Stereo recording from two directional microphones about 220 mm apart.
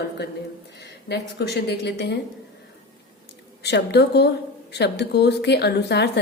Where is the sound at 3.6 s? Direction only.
50° left (ahead or behind).